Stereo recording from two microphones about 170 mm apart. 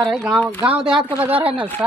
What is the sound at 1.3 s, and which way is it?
Speech, 35° right (ahead or behind).